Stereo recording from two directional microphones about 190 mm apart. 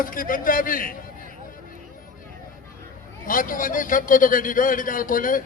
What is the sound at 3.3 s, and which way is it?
A man's voice, 45° left (ahead or behind).